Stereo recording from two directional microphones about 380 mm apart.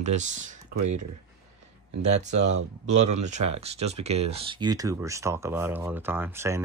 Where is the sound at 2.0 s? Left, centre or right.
Centre.